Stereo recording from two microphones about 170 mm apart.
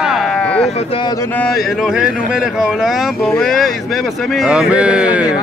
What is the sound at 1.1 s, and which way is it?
Speech, 15° left (ahead or behind).